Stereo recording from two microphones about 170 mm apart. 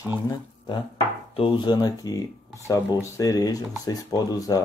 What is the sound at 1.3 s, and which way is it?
Chopping, 35° left (ahead or behind).